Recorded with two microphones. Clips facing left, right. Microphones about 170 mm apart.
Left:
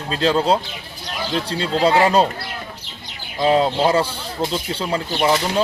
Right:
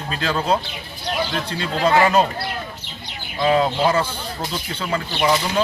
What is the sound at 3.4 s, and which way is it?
Speech, 30° left (ahead or behind).